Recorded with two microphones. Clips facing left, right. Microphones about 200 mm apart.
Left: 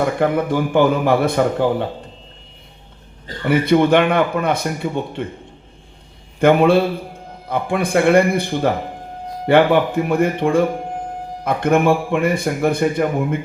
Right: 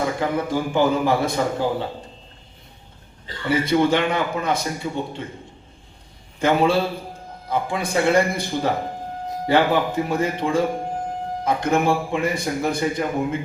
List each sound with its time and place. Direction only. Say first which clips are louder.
0.0 s a man's voice: left 5 dB; 60° left (ahead or behind)
3.2 s a man's voice: left 6 dB; 60° left (ahead or behind)
6.4 s a man's voice: left 6 dB; 60° left (ahead or behind)